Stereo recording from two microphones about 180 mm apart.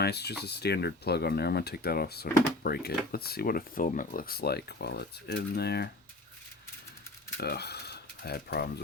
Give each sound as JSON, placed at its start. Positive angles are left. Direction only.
{"t": 0.0, "sound": "speech", "side_deg": 65}
{"t": 7.3, "sound": "speech", "side_deg": 60}